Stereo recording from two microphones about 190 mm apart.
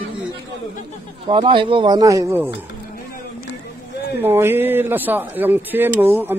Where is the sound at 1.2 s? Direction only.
25° right (ahead or behind).